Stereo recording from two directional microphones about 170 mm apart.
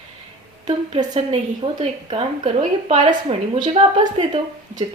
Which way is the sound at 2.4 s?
45° right (ahead or behind).